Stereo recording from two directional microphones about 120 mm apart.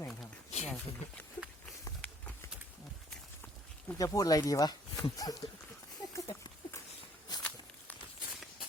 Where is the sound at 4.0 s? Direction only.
30° left (ahead or behind).